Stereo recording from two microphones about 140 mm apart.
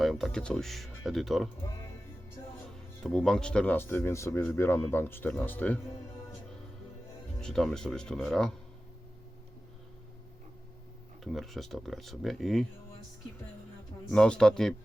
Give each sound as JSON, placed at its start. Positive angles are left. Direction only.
{"t": 0.0, "sound": "speech", "side_deg": 0}
{"t": 1.6, "sound": "music", "side_deg": 15}
{"t": 3.0, "sound": "speech", "side_deg": 5}
{"t": 7.4, "sound": "speech", "side_deg": 5}
{"t": 11.2, "sound": "speech", "side_deg": 0}
{"t": 14.1, "sound": "speech", "side_deg": 5}